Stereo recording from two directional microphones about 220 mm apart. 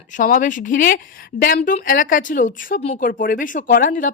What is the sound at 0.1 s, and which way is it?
Speech, 35° left (ahead or behind).